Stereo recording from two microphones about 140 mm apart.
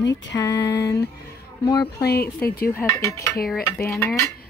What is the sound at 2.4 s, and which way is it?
Speech, 90° left.